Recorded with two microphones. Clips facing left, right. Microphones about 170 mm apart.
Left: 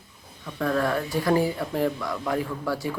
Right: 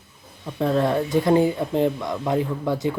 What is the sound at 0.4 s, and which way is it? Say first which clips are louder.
Speech: right 4 dB; 25° right (ahead or behind).